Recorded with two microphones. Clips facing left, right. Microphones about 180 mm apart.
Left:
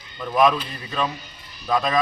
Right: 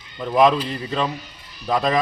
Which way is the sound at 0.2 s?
25° right (ahead or behind).